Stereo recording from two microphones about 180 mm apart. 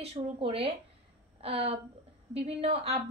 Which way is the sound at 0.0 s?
35° right (ahead or behind).